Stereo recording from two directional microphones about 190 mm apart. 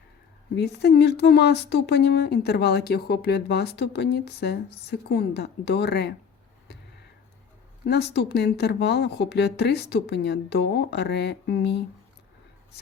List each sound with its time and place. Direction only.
0.5 s speech: 60° left (ahead or behind)
7.9 s speech: 60° left (ahead or behind)